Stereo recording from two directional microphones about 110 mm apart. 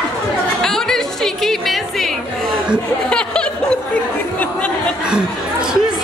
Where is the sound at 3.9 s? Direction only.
10° left (ahead or behind).